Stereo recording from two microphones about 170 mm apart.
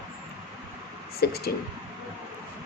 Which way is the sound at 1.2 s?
65° left (ahead or behind).